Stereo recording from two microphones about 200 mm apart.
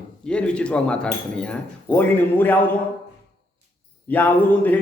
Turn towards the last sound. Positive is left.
turn(degrees=10)  # may be behind; listen again after turning